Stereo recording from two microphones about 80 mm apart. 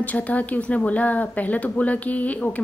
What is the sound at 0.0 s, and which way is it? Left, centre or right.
Speech, centre.